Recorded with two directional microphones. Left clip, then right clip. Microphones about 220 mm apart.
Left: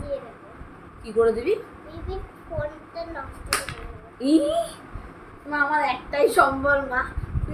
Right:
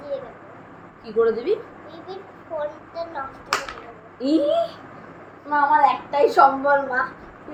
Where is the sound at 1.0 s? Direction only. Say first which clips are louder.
Right 1 dB; 20° left (ahead or behind).